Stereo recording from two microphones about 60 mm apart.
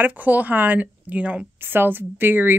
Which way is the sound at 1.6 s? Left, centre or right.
Right.